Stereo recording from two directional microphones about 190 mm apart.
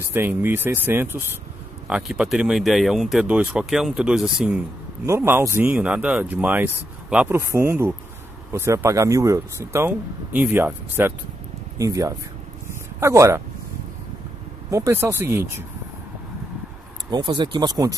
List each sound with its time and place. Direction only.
0.1 s speech: 10° right (ahead or behind)
5.0 s speech: 15° right (ahead or behind)
14.7 s speech: 15° right (ahead or behind)
17.1 s speech: 20° right (ahead or behind)